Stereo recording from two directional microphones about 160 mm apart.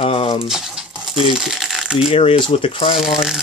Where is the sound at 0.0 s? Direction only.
35° left (ahead or behind).